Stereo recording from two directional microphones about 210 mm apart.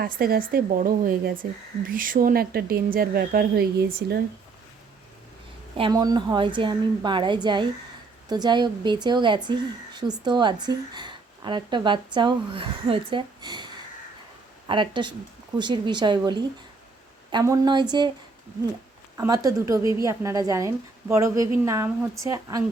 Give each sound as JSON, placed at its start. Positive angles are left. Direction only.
{"t": 0.0, "sound": "speech", "side_deg": -45}
{"t": 5.7, "sound": "speech", "side_deg": -20}
{"t": 14.7, "sound": "speech", "side_deg": -20}
{"t": 19.1, "sound": "a woman's voice", "side_deg": -15}